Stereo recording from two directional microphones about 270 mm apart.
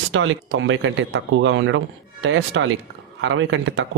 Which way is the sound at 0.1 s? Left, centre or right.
Right.